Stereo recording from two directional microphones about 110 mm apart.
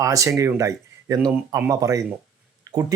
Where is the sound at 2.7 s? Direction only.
30° right (ahead or behind).